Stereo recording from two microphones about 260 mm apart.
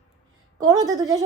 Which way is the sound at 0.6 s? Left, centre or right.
Centre.